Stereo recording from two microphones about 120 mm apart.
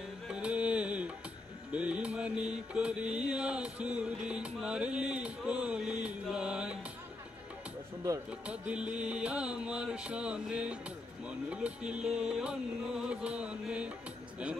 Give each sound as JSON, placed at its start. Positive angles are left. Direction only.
{"t": 0.3, "sound": "music", "side_deg": -10}
{"t": 1.7, "sound": "mantra", "side_deg": -10}
{"t": 8.3, "sound": "mantra", "side_deg": -10}